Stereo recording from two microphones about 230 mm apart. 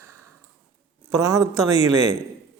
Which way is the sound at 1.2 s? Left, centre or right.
Centre.